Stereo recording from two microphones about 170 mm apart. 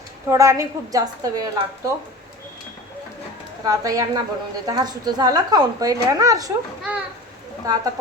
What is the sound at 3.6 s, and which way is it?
Speech, 20° right (ahead or behind).